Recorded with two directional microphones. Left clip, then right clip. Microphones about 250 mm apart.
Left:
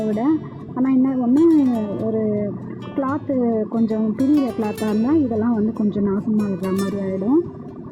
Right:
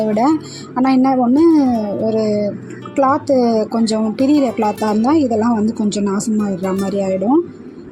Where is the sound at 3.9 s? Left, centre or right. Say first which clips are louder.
Right 4 dB; centre.